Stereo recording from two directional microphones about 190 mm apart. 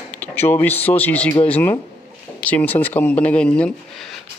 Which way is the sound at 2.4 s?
10° left (ahead or behind).